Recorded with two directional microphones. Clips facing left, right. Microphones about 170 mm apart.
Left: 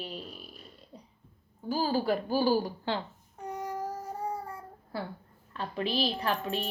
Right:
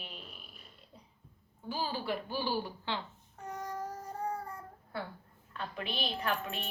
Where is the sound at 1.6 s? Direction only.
40° left (ahead or behind).